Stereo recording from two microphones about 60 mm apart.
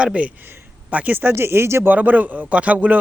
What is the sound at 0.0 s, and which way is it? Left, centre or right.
Speech, centre.